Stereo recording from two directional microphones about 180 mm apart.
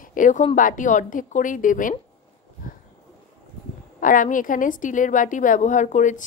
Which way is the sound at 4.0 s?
50° left (ahead or behind).